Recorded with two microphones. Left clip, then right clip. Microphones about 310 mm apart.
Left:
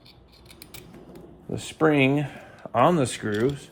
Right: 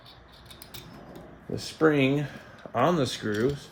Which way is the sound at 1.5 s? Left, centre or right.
Centre.